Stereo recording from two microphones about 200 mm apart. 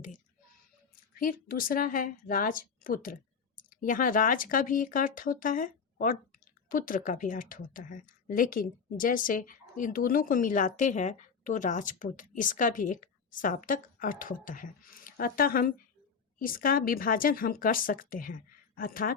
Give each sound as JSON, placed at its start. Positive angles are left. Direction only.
{"t": 1.2, "sound": "speech", "side_deg": 45}